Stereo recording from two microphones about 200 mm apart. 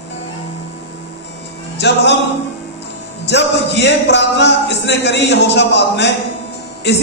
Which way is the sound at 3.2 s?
60° left (ahead or behind).